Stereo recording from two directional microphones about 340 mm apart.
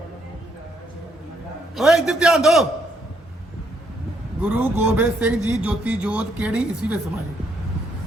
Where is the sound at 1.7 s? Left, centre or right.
Centre.